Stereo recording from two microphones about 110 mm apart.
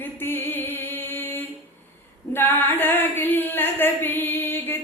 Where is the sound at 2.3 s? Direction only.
20° left (ahead or behind).